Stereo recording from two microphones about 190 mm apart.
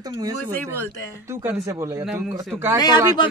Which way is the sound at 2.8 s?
20° left (ahead or behind).